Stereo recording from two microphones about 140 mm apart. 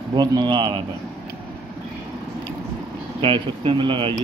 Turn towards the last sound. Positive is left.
turn(degrees=-35)  # may be behind; listen again after turning